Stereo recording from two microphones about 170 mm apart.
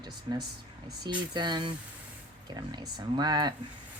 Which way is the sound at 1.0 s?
25° right (ahead or behind).